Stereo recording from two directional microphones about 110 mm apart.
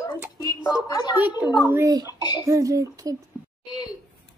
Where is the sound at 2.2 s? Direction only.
40° left (ahead or behind).